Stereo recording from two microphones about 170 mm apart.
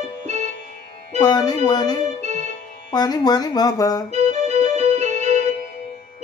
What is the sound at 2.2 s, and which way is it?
Music, 45° right (ahead or behind).